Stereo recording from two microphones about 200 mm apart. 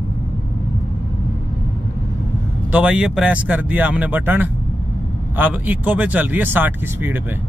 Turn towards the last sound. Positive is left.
turn(degrees=-10)  # may be behind; listen again after turning